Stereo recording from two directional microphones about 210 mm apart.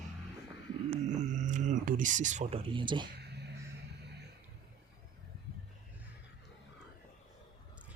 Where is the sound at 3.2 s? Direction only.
55° right (ahead or behind).